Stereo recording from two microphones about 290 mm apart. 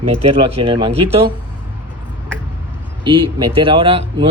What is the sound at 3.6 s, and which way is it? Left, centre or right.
Speech, centre.